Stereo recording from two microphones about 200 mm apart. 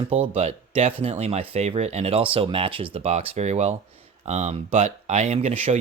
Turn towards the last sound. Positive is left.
turn(degrees=-30)  # may be behind; listen again after turning